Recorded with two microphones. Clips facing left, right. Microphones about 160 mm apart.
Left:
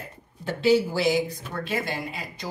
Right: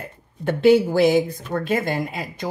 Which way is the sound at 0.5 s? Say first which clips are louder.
Right 6 dB; 55° right (ahead or behind).